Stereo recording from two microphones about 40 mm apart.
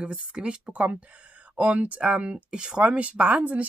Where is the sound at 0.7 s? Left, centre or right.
Right.